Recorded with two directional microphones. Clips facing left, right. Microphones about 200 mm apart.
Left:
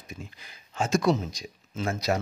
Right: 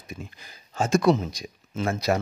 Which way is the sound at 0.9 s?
60° right (ahead or behind).